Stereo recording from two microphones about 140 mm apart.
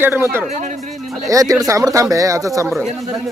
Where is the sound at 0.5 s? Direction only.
60° right (ahead or behind).